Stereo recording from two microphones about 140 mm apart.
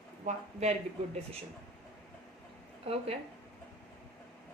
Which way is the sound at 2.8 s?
45° right (ahead or behind).